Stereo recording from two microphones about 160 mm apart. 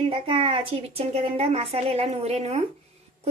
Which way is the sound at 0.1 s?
35° right (ahead or behind).